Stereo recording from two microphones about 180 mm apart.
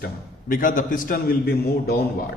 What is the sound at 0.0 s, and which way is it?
A man's voice, 50° left (ahead or behind).